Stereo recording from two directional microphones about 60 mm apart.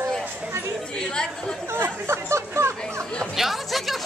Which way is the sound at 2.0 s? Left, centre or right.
Right.